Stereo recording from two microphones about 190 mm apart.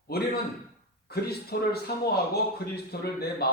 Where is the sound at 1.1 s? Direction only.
55° left (ahead or behind).